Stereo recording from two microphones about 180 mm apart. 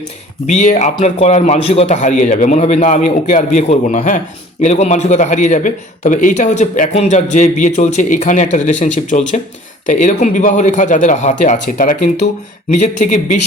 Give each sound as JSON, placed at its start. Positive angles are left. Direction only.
{"t": 0.4, "sound": "a man's voice", "side_deg": 40}